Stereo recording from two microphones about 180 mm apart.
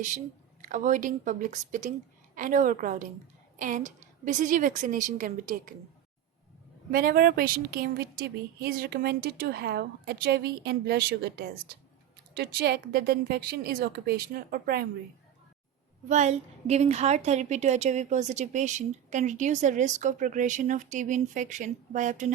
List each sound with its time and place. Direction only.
0.6 s a woman's voice: 45° right (ahead or behind)
6.9 s a woman's voice: 55° right (ahead or behind)
16.0 s a woman's voice: 40° right (ahead or behind)